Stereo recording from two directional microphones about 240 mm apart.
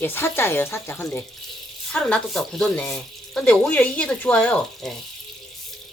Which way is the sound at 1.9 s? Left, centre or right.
Centre.